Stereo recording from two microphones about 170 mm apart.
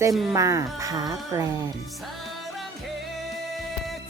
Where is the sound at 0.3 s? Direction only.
20° right (ahead or behind).